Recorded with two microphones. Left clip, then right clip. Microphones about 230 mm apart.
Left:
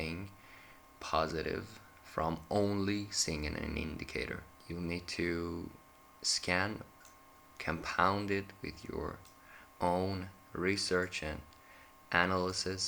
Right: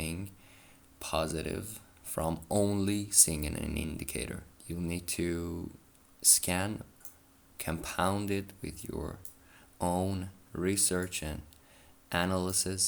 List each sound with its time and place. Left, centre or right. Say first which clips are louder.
0.0 s speech: right 1 dB; right